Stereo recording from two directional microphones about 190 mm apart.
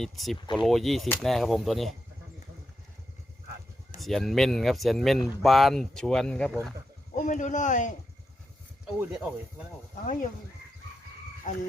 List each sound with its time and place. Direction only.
0.0 s speech: centre (ahead or behind)
4.0 s speech: centre (ahead or behind)
7.2 s speech: 40° left (ahead or behind)
9.0 s speech: 5° right (ahead or behind)
9.9 s speech: 40° left (ahead or behind)
11.5 s speech: 40° left (ahead or behind)